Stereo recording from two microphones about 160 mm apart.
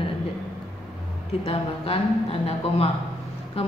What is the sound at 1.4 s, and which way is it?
Speech, 40° left (ahead or behind).